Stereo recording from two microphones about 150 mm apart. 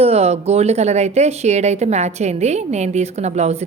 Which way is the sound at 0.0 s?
45° right (ahead or behind).